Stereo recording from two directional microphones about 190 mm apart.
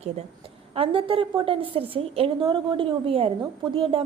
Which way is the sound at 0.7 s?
30° right (ahead or behind).